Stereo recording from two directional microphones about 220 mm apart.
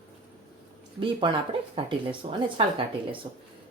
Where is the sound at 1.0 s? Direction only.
20° right (ahead or behind).